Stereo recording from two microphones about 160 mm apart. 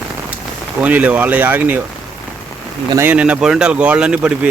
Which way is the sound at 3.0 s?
10° right (ahead or behind).